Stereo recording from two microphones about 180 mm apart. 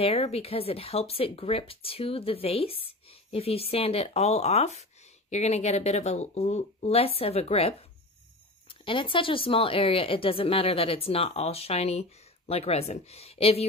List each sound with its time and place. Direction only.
0.0 s speech: 35° left (ahead or behind)